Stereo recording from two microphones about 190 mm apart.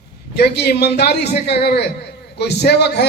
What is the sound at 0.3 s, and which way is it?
A man's voice, 60° left (ahead or behind).